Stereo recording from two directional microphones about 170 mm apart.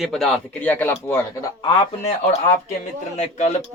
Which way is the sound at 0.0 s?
Centre (ahead or behind).